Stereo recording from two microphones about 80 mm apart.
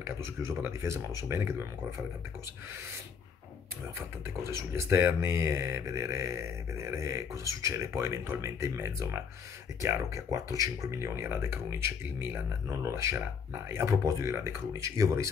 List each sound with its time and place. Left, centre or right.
0.0 s speech: right
4.5 s speech: right